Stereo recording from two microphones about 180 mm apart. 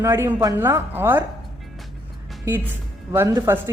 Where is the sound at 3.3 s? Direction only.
15° right (ahead or behind).